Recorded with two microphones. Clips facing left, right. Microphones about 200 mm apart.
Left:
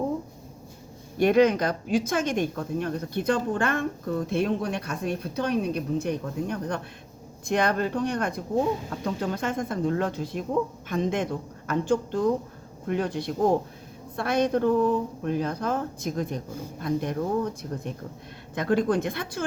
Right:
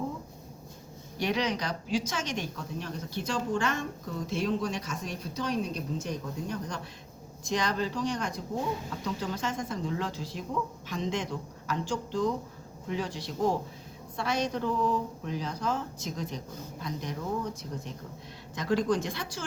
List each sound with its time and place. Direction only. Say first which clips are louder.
1.2 s speech: left 10 dB; 55° left (ahead or behind)